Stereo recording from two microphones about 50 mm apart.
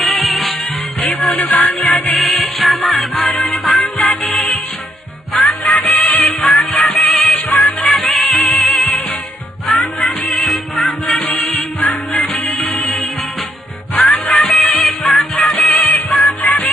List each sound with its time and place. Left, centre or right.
0.0 s music: centre
6.6 s music: centre